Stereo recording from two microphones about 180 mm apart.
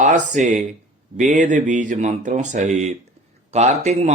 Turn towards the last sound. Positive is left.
turn(degrees=-40)  # may be behind; listen again after turning